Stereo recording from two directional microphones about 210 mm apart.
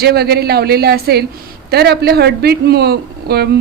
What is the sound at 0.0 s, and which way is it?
Speech, 50° right (ahead or behind).